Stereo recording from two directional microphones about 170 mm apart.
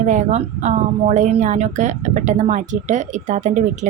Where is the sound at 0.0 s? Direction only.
45° right (ahead or behind).